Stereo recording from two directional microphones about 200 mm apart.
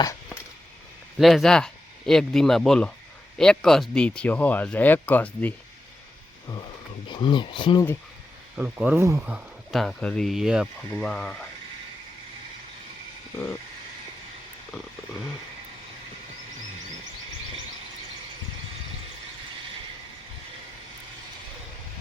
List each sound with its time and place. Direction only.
1.2 s speech: centre (ahead or behind)
7.1 s speech: 25° left (ahead or behind)
8.5 s speech: 5° right (ahead or behind)